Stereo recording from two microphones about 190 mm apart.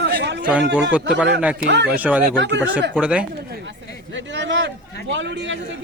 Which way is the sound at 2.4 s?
70° right (ahead or behind).